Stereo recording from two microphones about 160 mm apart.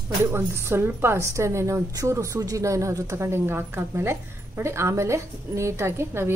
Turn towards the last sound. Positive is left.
turn(degrees=-15)  # may be behind; listen again after turning